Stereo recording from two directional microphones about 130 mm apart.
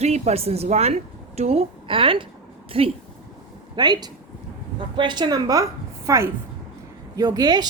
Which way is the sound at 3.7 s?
30° right (ahead or behind).